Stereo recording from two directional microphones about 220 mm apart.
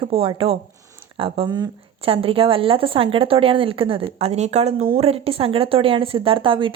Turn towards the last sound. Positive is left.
turn(degrees=-25)  # may be behind; listen again after turning